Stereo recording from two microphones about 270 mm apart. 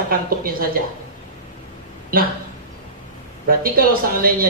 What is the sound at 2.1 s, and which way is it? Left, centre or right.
Speech, right.